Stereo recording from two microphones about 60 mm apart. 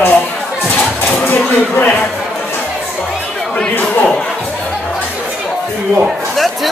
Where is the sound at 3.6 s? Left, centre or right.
Left.